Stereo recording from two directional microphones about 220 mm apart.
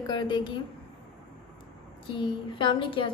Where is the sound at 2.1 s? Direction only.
20° left (ahead or behind).